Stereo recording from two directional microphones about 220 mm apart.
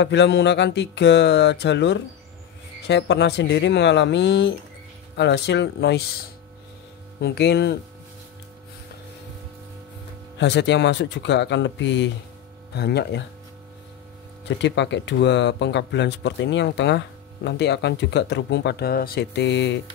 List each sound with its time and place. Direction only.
0.0 s speech: 55° left (ahead or behind)
7.2 s speech: 50° left (ahead or behind)
10.4 s speech: 55° left (ahead or behind)
14.4 s speech: 55° left (ahead or behind)